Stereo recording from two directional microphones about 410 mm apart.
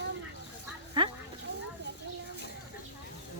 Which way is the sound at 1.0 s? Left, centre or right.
Centre.